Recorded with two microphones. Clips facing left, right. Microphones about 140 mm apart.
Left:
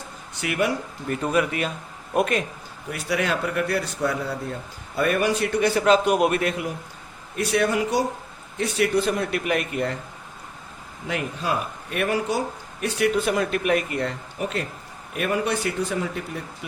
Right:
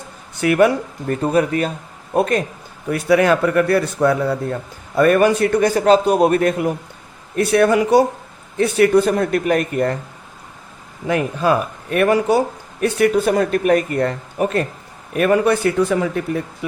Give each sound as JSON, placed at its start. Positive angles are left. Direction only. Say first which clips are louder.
{"t": 0.4, "sound": "a man's voice", "louder": "right 10 dB", "side_deg": -50}
{"t": 1.1, "sound": "speech", "louder": "right 6 dB", "side_deg": -35}
{"t": 2.9, "sound": "a man's voice", "louder": "right 10 dB", "side_deg": -55}
{"t": 7.3, "sound": "a man's voice", "louder": "right 8 dB", "side_deg": -60}
{"t": 11.1, "sound": "speech", "louder": "right 9 dB", "side_deg": -55}
{"t": 12.8, "sound": "a man's voice", "louder": "right 7 dB", "side_deg": -50}